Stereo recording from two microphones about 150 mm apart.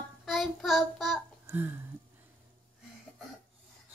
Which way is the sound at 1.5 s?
15° right (ahead or behind).